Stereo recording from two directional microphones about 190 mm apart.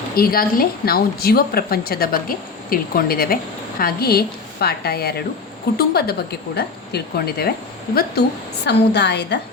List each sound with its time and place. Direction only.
0.2 s a woman's voice: 50° left (ahead or behind)
8.6 s a woman's voice: 65° left (ahead or behind)